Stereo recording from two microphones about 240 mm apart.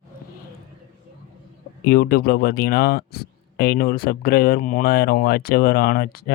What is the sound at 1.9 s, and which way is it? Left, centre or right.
Speech, left.